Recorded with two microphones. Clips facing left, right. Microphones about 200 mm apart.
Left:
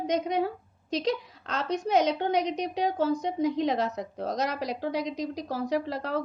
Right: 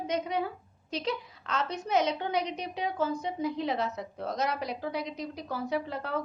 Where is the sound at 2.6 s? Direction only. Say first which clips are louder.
Left 4 dB; 40° left (ahead or behind).